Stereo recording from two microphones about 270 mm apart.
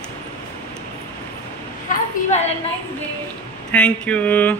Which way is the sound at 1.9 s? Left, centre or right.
Left.